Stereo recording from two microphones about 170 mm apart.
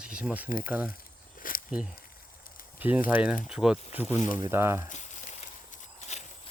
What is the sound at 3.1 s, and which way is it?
Speech, 5° right (ahead or behind).